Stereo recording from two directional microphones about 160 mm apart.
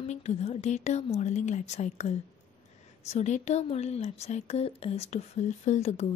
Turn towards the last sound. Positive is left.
turn(degrees=45)  # may be behind; listen again after turning